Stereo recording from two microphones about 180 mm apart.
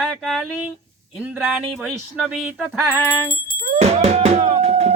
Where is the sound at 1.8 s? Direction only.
5° right (ahead or behind).